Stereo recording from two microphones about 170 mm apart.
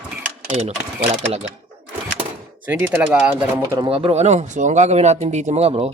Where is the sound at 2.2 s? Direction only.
30° right (ahead or behind).